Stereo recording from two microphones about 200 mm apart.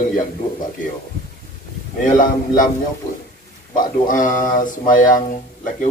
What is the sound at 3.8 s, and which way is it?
Speech, 40° left (ahead or behind).